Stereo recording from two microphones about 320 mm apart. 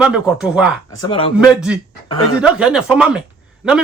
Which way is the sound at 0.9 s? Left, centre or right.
Centre.